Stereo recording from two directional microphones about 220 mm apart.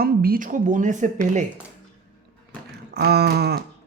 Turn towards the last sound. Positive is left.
turn(degrees=-45)  # may be behind; listen again after turning